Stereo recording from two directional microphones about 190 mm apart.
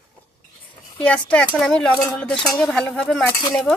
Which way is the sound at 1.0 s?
5° left (ahead or behind).